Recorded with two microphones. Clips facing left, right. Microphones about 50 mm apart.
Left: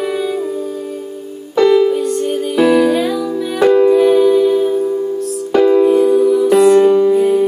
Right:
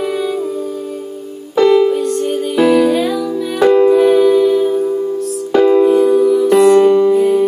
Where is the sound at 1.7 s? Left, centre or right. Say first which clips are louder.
Right 1 dB; centre.